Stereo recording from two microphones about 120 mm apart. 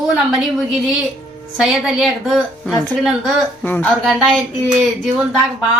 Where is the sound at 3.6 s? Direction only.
15° left (ahead or behind).